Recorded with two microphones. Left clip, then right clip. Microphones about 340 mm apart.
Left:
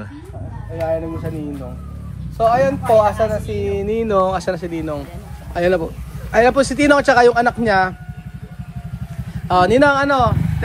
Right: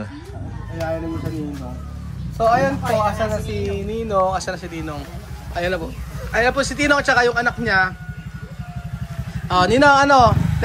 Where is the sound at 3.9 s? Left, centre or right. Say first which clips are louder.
Left 2 dB; left; by 7.9 s centre.